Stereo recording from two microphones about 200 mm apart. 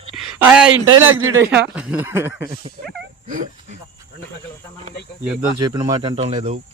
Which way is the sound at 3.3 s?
40° right (ahead or behind).